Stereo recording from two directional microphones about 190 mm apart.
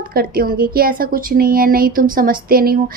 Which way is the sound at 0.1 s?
50° right (ahead or behind).